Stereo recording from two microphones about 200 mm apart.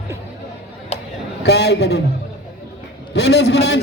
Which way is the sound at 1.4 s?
55° left (ahead or behind).